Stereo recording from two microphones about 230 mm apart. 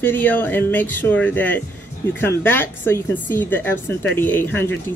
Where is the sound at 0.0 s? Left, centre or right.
Centre.